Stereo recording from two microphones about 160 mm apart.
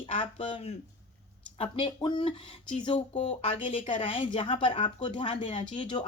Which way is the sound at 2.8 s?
40° left (ahead or behind).